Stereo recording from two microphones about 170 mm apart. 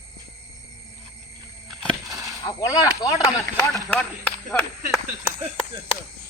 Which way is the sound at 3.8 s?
10° left (ahead or behind).